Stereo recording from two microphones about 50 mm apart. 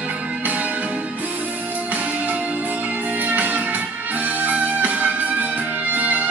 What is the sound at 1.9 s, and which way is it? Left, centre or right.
Music, right.